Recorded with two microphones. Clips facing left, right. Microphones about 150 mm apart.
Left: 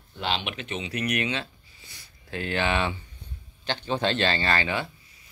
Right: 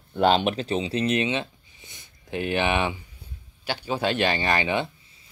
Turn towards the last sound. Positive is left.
turn(degrees=-20)  # may be behind; listen again after turning